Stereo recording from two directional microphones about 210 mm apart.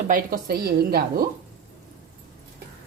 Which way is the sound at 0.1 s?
45° right (ahead or behind).